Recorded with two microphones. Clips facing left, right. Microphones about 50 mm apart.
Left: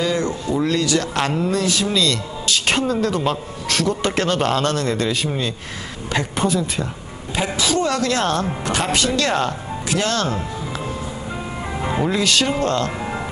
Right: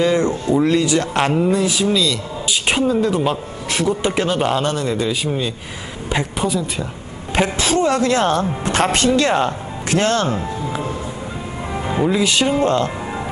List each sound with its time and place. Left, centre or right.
0.0 s speech: right; by 6.9 s centre
7.3 s a sound: right
7.8 s speech: right
8.7 s speech: right
9.1 s speech: right
9.8 s speech: right
11.8 s music: centre
12.1 s speech: centre